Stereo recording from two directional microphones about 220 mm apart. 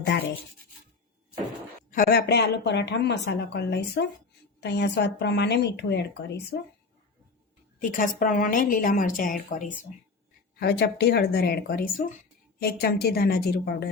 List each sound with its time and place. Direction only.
1.9 s speech: 40° left (ahead or behind)
7.8 s a woman's voice: 35° left (ahead or behind)
10.6 s speech: 50° left (ahead or behind)